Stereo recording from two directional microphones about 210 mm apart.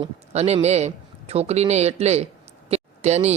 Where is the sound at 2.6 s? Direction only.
30° right (ahead or behind).